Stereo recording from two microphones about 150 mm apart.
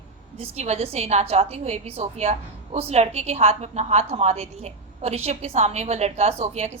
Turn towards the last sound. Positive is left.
turn(degrees=-45)  # may be behind; listen again after turning